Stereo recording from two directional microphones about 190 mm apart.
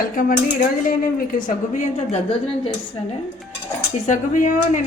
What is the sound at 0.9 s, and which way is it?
A woman's voice, 45° left (ahead or behind).